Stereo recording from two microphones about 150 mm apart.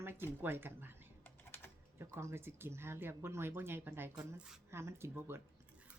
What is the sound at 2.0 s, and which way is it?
A woman's voice, 15° right (ahead or behind).